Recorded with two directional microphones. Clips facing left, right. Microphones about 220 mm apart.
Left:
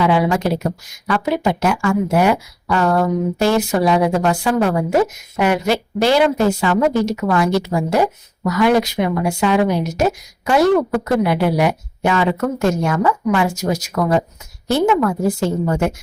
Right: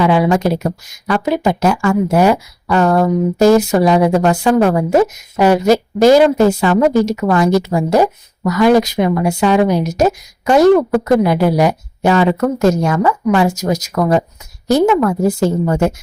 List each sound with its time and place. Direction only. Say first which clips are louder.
0.0 s speech: right 3 dB; 40° right (ahead or behind)